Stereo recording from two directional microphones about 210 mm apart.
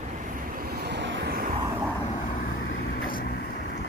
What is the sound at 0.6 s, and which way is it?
Vehicle, 50° right (ahead or behind).